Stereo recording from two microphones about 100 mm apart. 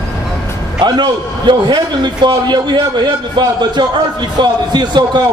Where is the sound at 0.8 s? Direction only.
50° right (ahead or behind).